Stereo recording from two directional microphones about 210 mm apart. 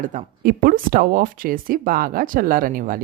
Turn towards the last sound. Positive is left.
turn(degrees=-40)  # may be behind; listen again after turning